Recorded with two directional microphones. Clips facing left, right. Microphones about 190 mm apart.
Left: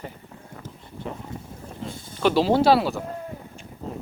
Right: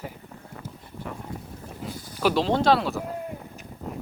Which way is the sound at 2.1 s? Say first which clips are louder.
Left 2 dB; 5° right (ahead or behind).